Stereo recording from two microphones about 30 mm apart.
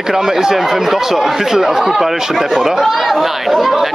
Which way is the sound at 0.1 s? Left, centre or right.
Centre.